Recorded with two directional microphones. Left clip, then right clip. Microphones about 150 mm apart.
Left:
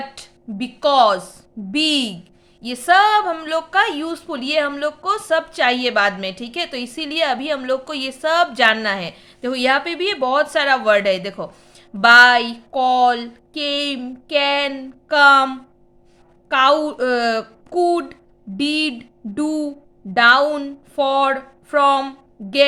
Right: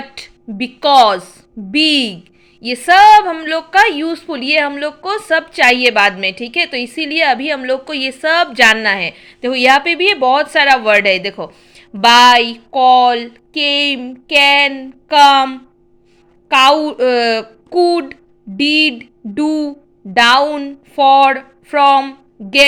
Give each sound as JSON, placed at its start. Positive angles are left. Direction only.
{"t": 0.1, "sound": "a woman's voice", "side_deg": -20}